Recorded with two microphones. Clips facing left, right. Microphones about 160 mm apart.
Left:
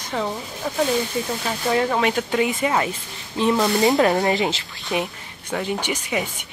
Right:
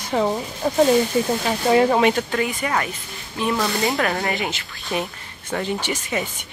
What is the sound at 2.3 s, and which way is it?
Speech, 20° left (ahead or behind).